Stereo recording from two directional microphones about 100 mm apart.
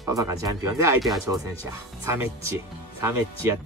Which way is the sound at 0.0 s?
35° right (ahead or behind).